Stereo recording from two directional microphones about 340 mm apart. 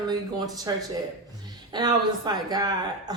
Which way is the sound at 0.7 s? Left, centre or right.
Centre.